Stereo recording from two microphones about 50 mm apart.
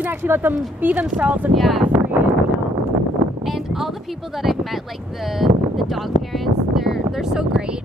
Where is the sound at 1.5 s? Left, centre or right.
Centre.